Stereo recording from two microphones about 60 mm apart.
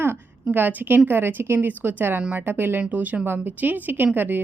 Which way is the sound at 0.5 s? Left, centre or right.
Right.